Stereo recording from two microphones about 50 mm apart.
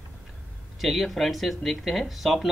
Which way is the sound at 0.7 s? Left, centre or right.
Centre.